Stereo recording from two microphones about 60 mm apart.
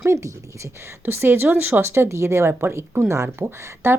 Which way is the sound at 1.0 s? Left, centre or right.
Right.